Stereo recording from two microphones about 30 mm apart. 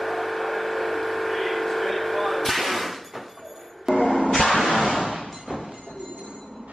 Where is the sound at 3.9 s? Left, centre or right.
Centre.